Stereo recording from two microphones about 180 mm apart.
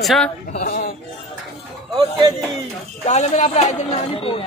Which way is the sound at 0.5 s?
55° left (ahead or behind).